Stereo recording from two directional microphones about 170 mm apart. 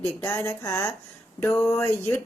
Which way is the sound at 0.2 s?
15° left (ahead or behind).